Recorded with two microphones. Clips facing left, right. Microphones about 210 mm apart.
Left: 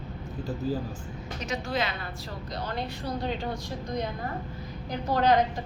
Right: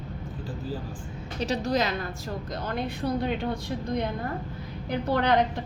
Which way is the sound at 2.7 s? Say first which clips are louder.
Right 5 dB; 55° right (ahead or behind).